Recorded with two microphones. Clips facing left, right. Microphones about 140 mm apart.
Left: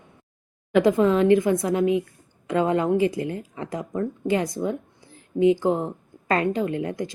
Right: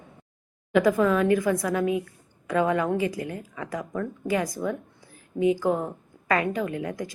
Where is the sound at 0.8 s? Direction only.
25° left (ahead or behind).